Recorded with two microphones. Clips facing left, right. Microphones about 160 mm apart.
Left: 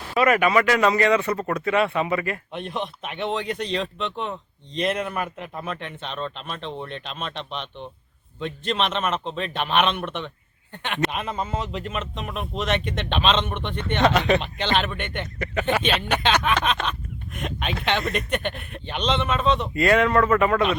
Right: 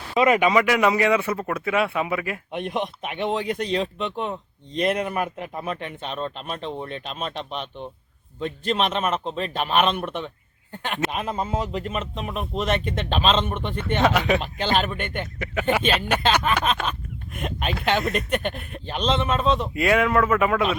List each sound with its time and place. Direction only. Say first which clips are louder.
0.1 s speech: right 1 dB; 20° right (ahead or behind); by 20.7 s 5° right (ahead or behind)